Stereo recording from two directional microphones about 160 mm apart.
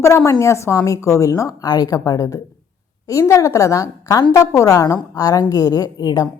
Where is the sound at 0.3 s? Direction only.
20° left (ahead or behind).